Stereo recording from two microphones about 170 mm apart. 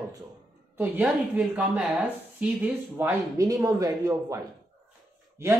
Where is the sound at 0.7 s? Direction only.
10° right (ahead or behind).